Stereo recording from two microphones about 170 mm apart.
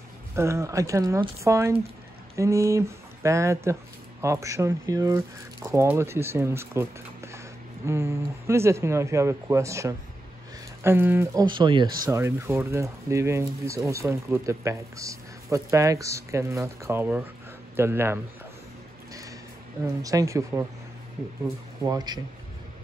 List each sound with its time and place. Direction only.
0.4 s speech: 15° right (ahead or behind)
11.4 s speech: 25° right (ahead or behind)
19.8 s speech: 20° right (ahead or behind)
21.8 s speech: 25° right (ahead or behind)